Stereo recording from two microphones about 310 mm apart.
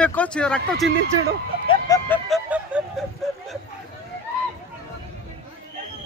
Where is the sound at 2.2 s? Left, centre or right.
Centre.